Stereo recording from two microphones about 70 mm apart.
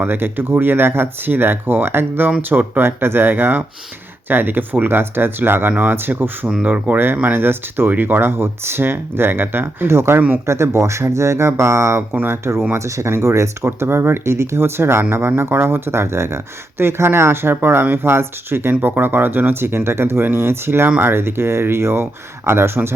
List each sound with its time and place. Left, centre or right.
0.0 s speech: right
6.5 s speech: centre; by 10.2 s right
10.2 s speech: right
10.4 s speech: right
12.1 s speech: right
12.7 s speech: right